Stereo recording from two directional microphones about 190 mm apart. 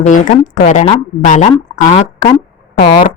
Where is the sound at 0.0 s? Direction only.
40° left (ahead or behind).